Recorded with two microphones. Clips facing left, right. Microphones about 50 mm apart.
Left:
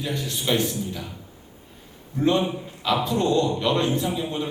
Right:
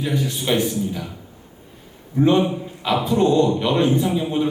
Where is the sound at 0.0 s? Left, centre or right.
Centre.